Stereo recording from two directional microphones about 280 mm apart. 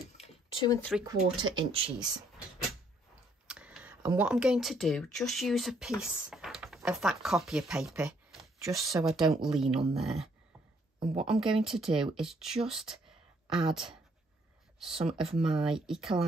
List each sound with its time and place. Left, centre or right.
0.0 s a sound: left
0.7 s speech: centre
1.4 s speech: centre
2.0 s speech: centre
3.4 s speech: centre
15.0 s speech: centre